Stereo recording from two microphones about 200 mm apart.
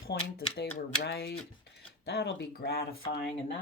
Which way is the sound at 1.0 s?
55° left (ahead or behind).